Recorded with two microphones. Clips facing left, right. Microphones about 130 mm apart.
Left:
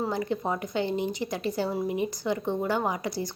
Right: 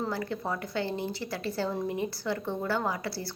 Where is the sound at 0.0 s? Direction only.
20° left (ahead or behind).